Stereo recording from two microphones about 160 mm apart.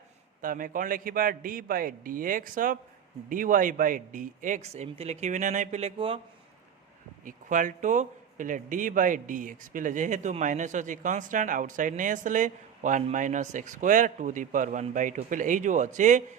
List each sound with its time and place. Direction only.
0.4 s a man's voice: 60° right (ahead or behind); by 6.1 s 35° right (ahead or behind)
7.3 s a man's voice: 55° right (ahead or behind)